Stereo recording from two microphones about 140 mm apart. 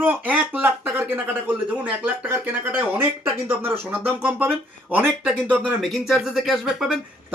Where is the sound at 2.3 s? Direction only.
15° right (ahead or behind).